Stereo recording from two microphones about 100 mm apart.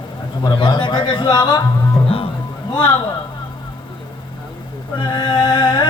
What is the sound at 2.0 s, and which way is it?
Music, 70° left (ahead or behind).